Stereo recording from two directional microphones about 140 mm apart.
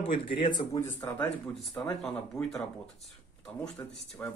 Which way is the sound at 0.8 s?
15° left (ahead or behind).